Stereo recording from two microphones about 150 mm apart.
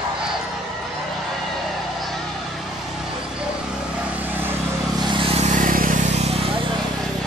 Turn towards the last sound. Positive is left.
turn(degrees=-65)  # may be behind; listen again after turning